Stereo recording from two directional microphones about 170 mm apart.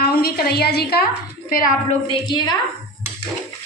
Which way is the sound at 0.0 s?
65° left (ahead or behind).